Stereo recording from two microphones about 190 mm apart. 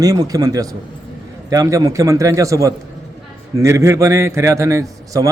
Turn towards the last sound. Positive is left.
turn(degrees=-15)  # may be behind; listen again after turning